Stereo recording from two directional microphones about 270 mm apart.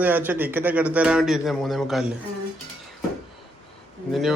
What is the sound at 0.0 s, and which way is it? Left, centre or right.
Speech, centre.